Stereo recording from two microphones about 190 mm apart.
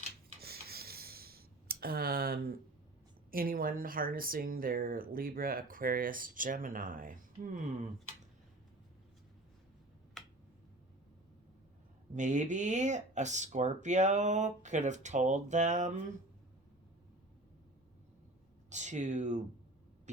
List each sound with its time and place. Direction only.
0.4 s a sound: 55° right (ahead or behind)
3.3 s speech: 50° right (ahead or behind)
10.2 s finger snapping: centre (ahead or behind)
12.1 s speech: 40° right (ahead or behind)
18.7 s speech: 40° right (ahead or behind)